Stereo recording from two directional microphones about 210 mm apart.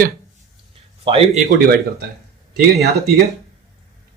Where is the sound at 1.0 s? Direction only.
25° right (ahead or behind).